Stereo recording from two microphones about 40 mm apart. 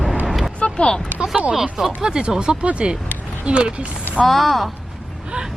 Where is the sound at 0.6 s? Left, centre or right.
Left.